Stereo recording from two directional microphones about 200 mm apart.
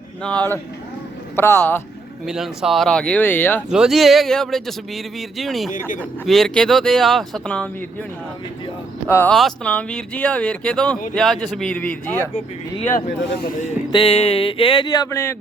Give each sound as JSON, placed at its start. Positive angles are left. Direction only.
{"t": 0.2, "sound": "speech", "side_deg": 5}
{"t": 2.2, "sound": "speech", "side_deg": 0}
{"t": 3.7, "sound": "speech", "side_deg": 0}
{"t": 9.0, "sound": "speech", "side_deg": 10}
{"t": 13.9, "sound": "a sound", "side_deg": 25}